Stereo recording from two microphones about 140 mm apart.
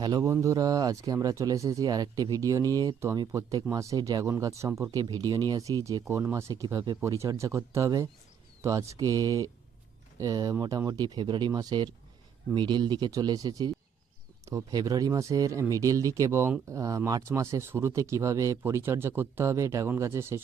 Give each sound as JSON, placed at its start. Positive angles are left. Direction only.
{"t": 0.0, "sound": "speech", "side_deg": -25}